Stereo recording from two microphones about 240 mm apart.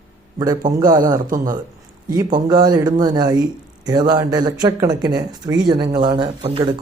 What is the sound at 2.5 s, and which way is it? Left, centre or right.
Speech, centre.